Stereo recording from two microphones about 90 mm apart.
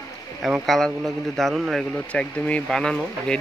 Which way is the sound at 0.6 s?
5° left (ahead or behind).